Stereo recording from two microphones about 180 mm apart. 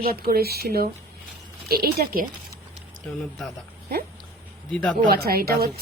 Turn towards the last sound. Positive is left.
turn(degrees=-60)  # may be behind; listen again after turning